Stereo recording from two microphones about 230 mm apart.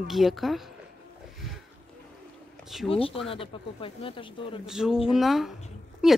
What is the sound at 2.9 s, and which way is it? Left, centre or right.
Speech, left.